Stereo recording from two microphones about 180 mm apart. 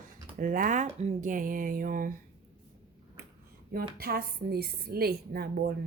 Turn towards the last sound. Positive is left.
turn(degrees=-60)  # may be behind; listen again after turning